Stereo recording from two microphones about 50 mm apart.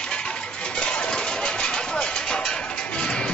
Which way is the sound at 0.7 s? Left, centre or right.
Centre.